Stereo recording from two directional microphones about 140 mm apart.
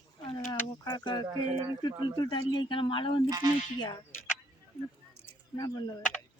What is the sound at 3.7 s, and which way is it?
Speech, 30° left (ahead or behind).